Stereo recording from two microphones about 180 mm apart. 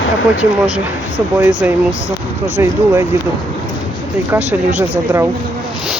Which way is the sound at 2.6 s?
15° right (ahead or behind).